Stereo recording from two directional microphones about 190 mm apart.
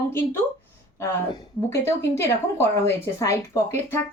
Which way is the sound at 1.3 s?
15° left (ahead or behind).